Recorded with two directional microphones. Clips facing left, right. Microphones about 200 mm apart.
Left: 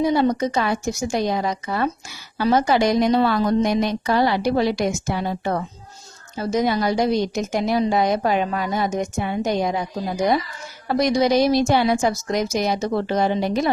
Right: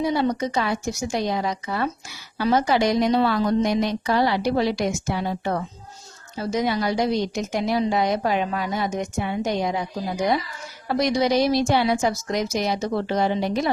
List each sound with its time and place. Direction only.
0.0 s a woman's voice: 45° left (ahead or behind)
10.8 s a woman's voice: 45° left (ahead or behind)